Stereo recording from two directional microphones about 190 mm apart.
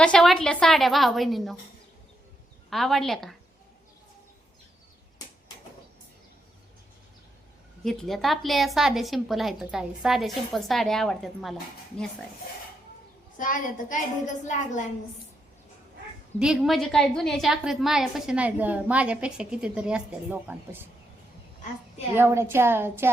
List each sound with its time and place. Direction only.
0.0 s a woman's voice: 5° left (ahead or behind)
2.6 s a woman's voice: centre (ahead or behind)
7.9 s a woman's voice: centre (ahead or behind)
13.3 s a child's voice: 45° left (ahead or behind)
16.4 s a woman's voice: 5° right (ahead or behind)
22.1 s a woman's voice: 15° right (ahead or behind)